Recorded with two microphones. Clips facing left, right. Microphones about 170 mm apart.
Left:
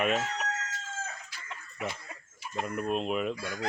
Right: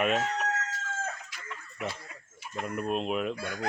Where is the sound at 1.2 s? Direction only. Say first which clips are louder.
Right 1 dB; 35° left (ahead or behind).